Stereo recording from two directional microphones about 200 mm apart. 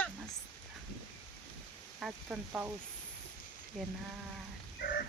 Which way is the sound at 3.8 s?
Centre (ahead or behind).